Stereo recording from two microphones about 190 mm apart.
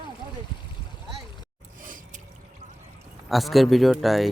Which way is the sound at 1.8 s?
45° right (ahead or behind).